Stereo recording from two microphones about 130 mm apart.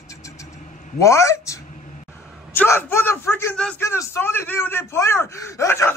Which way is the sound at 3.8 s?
20° left (ahead or behind).